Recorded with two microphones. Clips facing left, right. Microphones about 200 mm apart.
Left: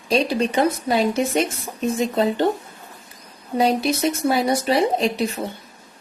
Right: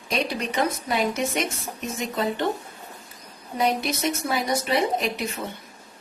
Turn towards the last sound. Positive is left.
turn(degrees=35)  # may be behind; listen again after turning